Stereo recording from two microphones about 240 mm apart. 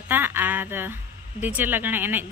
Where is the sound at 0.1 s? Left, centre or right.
Centre.